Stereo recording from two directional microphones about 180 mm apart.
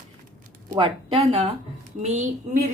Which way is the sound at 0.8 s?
25° right (ahead or behind).